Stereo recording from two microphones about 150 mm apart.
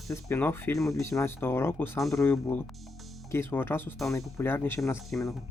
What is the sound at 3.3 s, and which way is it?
Speech, 15° left (ahead or behind).